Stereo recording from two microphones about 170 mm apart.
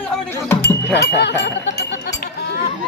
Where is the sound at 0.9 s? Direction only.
85° left.